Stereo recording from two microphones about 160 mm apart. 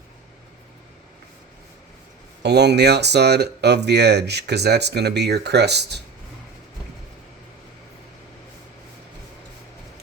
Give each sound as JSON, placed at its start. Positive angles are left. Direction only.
{"t": 2.4, "sound": "speech", "side_deg": -90}